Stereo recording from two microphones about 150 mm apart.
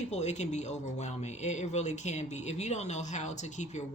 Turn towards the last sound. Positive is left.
turn(degrees=50)  # may be behind; listen again after turning